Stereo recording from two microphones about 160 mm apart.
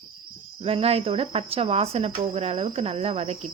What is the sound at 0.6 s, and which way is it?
Speech, 35° right (ahead or behind).